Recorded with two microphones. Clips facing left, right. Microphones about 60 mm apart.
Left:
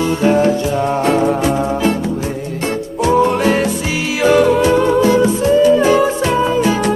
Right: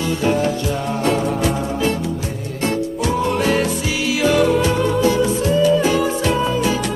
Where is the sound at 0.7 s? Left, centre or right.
Centre.